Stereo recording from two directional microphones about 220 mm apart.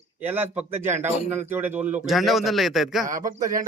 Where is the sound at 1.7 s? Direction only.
30° right (ahead or behind).